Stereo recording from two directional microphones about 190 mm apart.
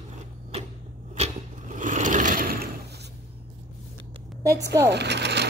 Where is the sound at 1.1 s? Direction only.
40° right (ahead or behind).